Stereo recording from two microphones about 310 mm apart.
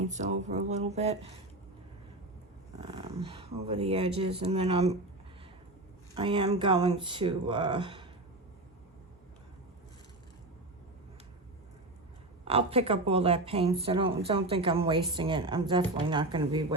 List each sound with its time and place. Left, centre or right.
0.0 s speech: right
2.8 s speech: centre
6.1 s a woman's voice: centre
12.5 s a woman's voice: centre